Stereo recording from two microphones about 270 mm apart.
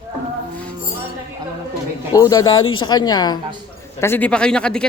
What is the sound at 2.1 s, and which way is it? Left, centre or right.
Speech, centre.